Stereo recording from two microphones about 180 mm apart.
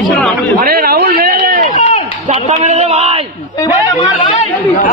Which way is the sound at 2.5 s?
35° right (ahead or behind).